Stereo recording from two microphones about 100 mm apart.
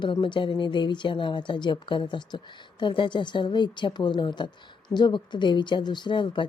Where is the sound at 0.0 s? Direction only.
50° left (ahead or behind).